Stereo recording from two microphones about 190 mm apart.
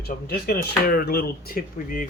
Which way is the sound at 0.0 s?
55° left (ahead or behind).